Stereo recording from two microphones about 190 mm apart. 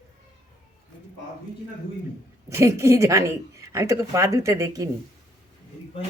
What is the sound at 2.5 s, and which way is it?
A woman's voice, 15° right (ahead or behind).